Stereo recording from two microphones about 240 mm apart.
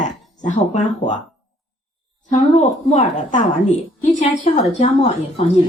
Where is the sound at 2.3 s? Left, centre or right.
Left.